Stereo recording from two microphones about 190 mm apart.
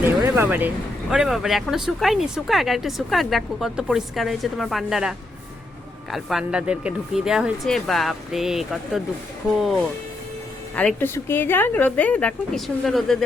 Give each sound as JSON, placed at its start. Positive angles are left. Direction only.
{"t": 0.0, "sound": "a sound", "side_deg": -10}
{"t": 1.1, "sound": "speech", "side_deg": -5}
{"t": 10.8, "sound": "speech", "side_deg": 10}